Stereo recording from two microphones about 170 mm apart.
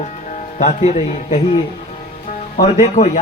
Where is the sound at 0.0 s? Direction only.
45° left (ahead or behind).